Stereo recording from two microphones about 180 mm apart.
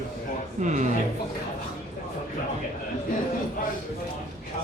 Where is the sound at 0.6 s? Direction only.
40° right (ahead or behind).